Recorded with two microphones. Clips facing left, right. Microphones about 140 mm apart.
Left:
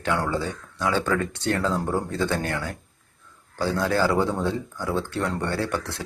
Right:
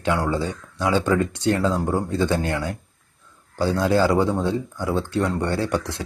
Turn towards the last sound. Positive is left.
turn(degrees=-15)  # may be behind; listen again after turning